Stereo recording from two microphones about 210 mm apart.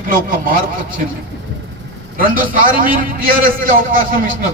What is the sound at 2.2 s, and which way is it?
A man's voice, 40° right (ahead or behind).